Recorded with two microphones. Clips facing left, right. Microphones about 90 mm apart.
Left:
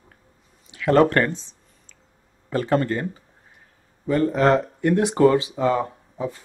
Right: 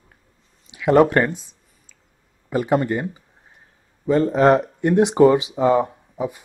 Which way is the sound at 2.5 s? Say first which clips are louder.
Right 2 dB; 15° right (ahead or behind).